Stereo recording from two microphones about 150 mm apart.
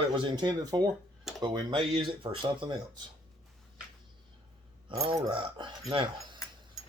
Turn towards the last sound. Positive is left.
turn(degrees=-30)  # may be behind; listen again after turning